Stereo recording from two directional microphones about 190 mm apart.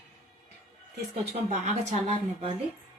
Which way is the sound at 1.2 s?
40° right (ahead or behind).